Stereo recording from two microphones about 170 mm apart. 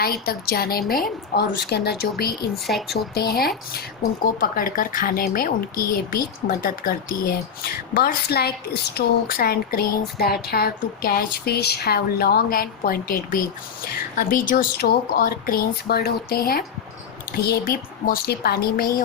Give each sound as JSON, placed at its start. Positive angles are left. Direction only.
{"t": 0.0, "sound": "a woman's voice", "side_deg": 65}